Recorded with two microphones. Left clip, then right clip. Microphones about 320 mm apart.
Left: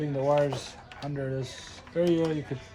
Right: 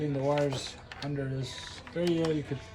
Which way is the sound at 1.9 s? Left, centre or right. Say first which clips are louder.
Left 5 dB; centre.